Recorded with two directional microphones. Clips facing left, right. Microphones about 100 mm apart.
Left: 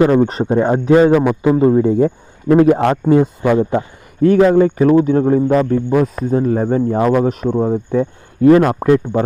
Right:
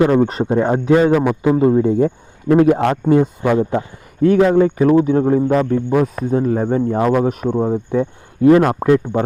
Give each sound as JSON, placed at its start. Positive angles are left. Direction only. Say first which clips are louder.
{"t": 0.2, "sound": "a man's voice", "louder": "left 1 dB", "side_deg": 0}
{"t": 1.0, "sound": "a man's voice", "louder": "left 2 dB", "side_deg": 15}
{"t": 1.5, "sound": "a man's voice", "louder": "left 1 dB", "side_deg": 30}
{"t": 2.0, "sound": "a man's voice", "louder": "left 2 dB", "side_deg": 40}
{"t": 4.5, "sound": "a man's voice", "louder": "left 1 dB", "side_deg": 0}